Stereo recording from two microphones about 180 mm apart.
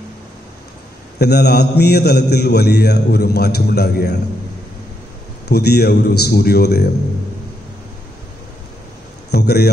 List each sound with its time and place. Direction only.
1.2 s a man's voice: 65° left (ahead or behind)
5.5 s a man's voice: 65° left (ahead or behind)
9.3 s a man's voice: 65° left (ahead or behind)